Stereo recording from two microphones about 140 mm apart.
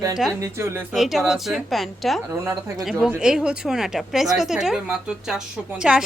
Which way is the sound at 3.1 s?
5° right (ahead or behind).